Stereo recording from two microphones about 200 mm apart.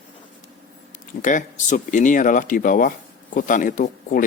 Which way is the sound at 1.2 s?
40° left (ahead or behind).